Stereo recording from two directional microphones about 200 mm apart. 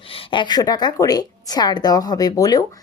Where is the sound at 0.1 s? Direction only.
25° left (ahead or behind).